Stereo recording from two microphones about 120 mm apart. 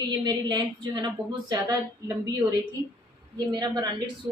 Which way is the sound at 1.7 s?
30° right (ahead or behind).